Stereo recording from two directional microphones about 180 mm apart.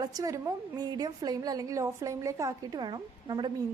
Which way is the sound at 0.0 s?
20° right (ahead or behind).